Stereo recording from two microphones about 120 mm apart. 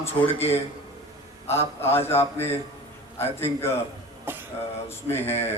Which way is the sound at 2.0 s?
20° left (ahead or behind).